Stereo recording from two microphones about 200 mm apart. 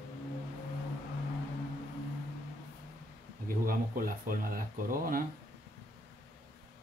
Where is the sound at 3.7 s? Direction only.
45° right (ahead or behind).